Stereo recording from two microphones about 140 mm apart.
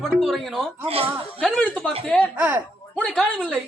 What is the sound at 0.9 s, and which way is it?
Speech, 45° right (ahead or behind).